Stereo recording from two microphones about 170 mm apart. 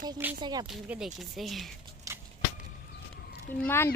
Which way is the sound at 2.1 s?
20° right (ahead or behind).